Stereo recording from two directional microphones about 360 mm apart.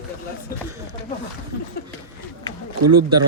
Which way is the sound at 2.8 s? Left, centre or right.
Right.